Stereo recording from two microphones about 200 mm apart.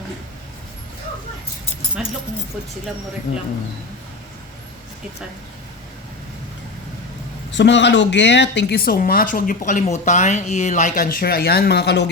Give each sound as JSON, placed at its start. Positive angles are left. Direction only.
{"t": 2.0, "sound": "speech", "side_deg": -5}
{"t": 7.5, "sound": "speech", "side_deg": 60}